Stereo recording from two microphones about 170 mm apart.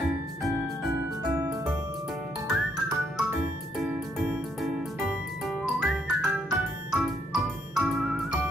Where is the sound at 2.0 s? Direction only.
Centre (ahead or behind).